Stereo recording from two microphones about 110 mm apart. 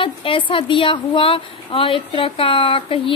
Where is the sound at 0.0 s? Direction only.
50° left (ahead or behind).